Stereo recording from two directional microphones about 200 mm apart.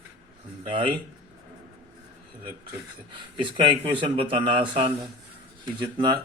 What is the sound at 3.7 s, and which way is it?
Speech, 25° right (ahead or behind).